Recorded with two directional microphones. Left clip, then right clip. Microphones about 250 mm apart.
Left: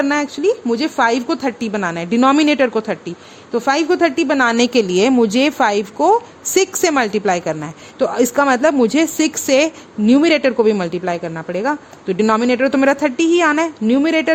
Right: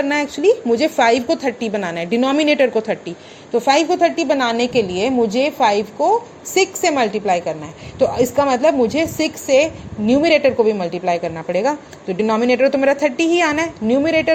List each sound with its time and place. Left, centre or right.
0.0 s a woman's voice: centre